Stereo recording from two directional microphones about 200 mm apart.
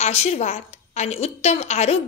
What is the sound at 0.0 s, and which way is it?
A woman's voice, 30° left (ahead or behind).